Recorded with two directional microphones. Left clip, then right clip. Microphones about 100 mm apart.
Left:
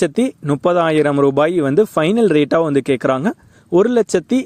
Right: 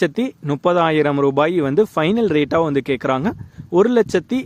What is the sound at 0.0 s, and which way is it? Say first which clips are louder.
Speech: left 3 dB; 30° left (ahead or behind).